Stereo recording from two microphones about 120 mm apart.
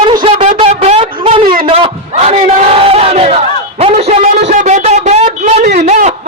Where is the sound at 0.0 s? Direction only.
40° right (ahead or behind).